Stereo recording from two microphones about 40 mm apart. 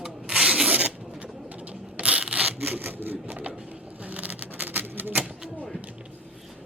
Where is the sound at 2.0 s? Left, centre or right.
Right.